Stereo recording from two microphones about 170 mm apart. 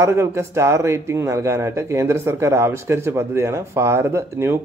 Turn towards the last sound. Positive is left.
turn(degrees=-15)  # may be behind; listen again after turning